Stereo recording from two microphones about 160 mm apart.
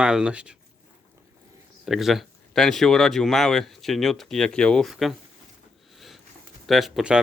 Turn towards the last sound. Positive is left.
turn(degrees=-5)  # may be behind; listen again after turning